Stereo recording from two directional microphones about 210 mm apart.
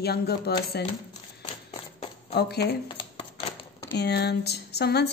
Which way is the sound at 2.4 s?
50° left (ahead or behind).